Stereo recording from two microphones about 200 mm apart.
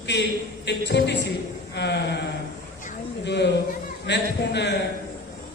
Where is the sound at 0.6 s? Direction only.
60° left (ahead or behind).